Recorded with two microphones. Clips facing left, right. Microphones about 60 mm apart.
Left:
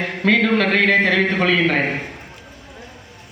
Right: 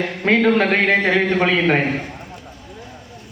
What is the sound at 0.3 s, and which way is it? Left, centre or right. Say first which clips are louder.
Speech: right 1 dB; right.